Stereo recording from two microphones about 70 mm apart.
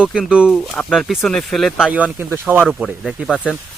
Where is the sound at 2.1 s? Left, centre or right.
Right.